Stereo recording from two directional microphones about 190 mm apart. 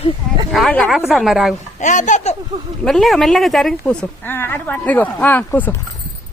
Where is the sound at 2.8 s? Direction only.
Centre (ahead or behind).